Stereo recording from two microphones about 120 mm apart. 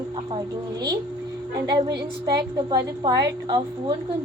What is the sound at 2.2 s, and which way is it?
A woman's voice, 35° right (ahead or behind).